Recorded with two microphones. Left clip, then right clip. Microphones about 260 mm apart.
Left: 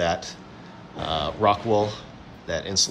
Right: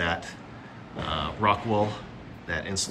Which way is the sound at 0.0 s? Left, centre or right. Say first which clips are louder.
Left 4 dB; centre.